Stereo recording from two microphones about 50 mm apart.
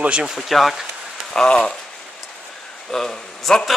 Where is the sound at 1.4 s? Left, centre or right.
Centre.